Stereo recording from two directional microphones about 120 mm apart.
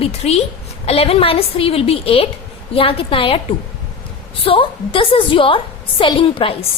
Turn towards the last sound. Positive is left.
turn(degrees=45)  # may be behind; listen again after turning